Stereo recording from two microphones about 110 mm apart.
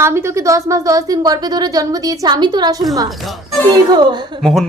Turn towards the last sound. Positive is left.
turn(degrees=0)  # may be behind; listen again after turning